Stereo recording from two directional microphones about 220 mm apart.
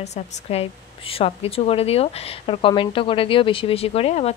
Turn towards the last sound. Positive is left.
turn(degrees=30)  # may be behind; listen again after turning